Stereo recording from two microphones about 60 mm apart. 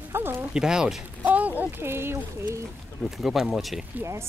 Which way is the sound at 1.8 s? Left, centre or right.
Right.